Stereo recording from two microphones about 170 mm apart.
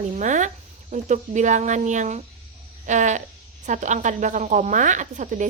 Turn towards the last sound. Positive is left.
turn(degrees=-45)  # may be behind; listen again after turning